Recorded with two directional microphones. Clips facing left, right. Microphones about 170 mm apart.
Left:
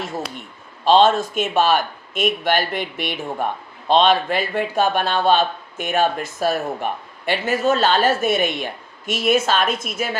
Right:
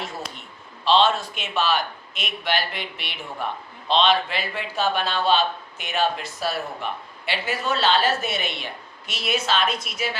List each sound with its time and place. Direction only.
0.9 s a man's voice: 45° left (ahead or behind)